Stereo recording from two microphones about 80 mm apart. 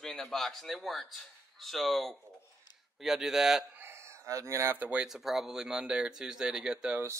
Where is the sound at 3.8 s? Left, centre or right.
Right.